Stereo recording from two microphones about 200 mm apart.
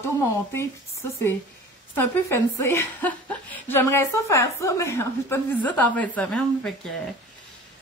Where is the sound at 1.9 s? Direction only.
10° left (ahead or behind).